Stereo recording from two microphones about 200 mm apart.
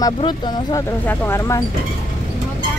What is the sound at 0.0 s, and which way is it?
Speech, 20° left (ahead or behind).